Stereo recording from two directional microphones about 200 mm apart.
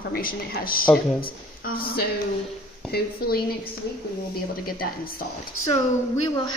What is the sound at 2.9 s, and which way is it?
Speech, 50° left (ahead or behind).